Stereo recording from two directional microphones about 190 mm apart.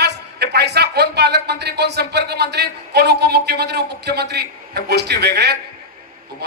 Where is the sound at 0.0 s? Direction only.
60° right (ahead or behind).